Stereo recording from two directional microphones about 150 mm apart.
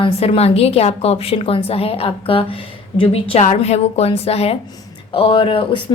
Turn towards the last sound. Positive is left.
turn(degrees=35)  # may be behind; listen again after turning